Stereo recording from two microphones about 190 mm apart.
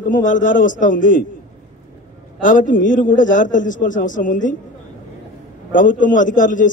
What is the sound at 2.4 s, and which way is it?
A man's voice, 45° left (ahead or behind).